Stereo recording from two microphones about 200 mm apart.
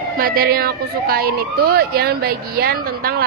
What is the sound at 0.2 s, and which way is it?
Speech, 50° right (ahead or behind).